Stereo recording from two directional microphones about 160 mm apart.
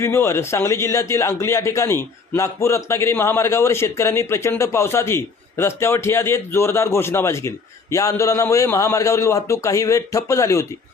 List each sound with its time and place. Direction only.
0.0 s a man's voice: 15° left (ahead or behind)